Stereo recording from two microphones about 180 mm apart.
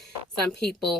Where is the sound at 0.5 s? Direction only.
65° left (ahead or behind).